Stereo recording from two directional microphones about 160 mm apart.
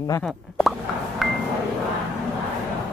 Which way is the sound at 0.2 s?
Centre (ahead or behind).